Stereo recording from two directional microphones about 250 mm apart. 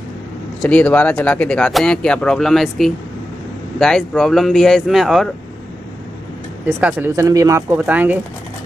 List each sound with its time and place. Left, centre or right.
0.6 s speech: centre
6.6 s speech: centre